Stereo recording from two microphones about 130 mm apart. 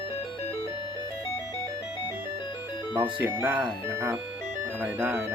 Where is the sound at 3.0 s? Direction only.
25° right (ahead or behind).